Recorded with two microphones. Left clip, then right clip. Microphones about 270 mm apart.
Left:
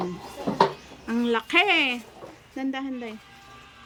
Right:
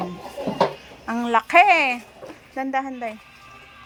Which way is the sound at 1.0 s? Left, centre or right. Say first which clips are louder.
Right 5 dB; centre.